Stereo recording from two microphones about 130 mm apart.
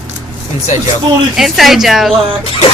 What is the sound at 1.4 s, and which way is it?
Speech, centre (ahead or behind).